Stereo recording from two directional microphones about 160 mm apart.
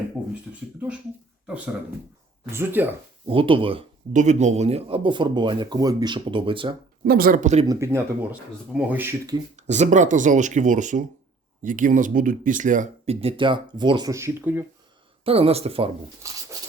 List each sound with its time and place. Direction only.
0.5 s speech: 10° right (ahead or behind)
3.2 s speech: 35° right (ahead or behind)
4.1 s speech: 50° right (ahead or behind); by 6.7 s 30° right (ahead or behind)
7.0 s speech: 65° right (ahead or behind); by 7.7 s 45° right (ahead or behind)
7.7 s speech: 15° right (ahead or behind)
9.6 s speech: 45° right (ahead or behind)
13.2 s speech: 30° right (ahead or behind); by 14.6 s 15° right (ahead or behind)
15.2 s speech: 35° right (ahead or behind)
16.2 s speech: 20° right (ahead or behind)